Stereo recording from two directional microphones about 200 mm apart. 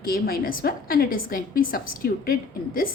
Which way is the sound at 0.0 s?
50° left (ahead or behind).